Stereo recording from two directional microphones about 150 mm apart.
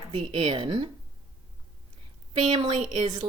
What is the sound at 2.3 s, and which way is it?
Speech, 35° right (ahead or behind).